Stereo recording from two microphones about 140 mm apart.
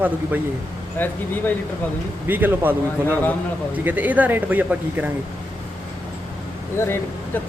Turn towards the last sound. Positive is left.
turn(degrees=15)  # may be behind; listen again after turning